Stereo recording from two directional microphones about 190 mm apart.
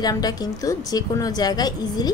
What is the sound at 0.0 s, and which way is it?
A woman's voice, 20° left (ahead or behind).